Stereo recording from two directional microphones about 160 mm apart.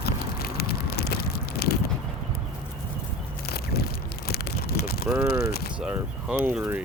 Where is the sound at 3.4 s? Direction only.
75° left (ahead or behind).